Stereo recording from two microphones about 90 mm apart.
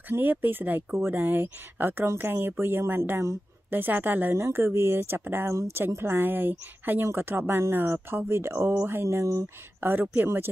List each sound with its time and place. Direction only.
0.1 s speech: 20° right (ahead or behind)
9.8 s speech: 20° right (ahead or behind)